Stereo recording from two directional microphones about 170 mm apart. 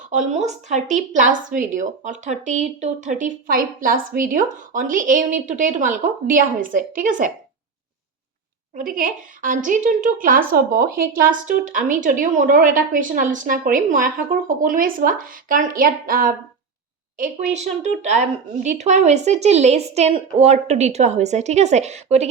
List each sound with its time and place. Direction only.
0.1 s a woman's voice: 45° right (ahead or behind)
8.7 s a woman's voice: 55° right (ahead or behind)